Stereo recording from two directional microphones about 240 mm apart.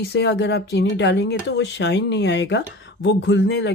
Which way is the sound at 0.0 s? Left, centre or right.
Left.